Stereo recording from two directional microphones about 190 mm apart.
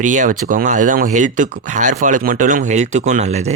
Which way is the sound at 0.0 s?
40° right (ahead or behind).